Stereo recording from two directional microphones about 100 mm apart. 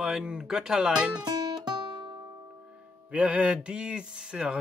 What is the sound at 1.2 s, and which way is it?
Guitar, 40° right (ahead or behind).